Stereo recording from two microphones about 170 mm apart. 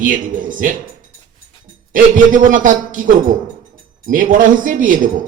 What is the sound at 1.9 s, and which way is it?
A man's voice, 50° right (ahead or behind).